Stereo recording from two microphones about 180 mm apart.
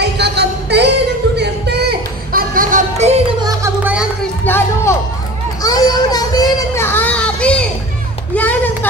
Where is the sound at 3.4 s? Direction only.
20° right (ahead or behind).